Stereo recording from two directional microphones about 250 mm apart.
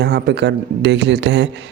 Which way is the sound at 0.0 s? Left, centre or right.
Right.